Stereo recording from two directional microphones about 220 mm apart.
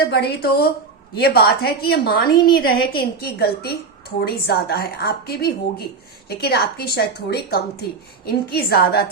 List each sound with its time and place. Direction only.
0.0 s a woman's voice: 50° left (ahead or behind)